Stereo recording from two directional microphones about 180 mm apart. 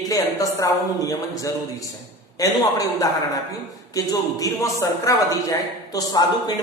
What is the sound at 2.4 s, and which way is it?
A man's voice, 20° left (ahead or behind).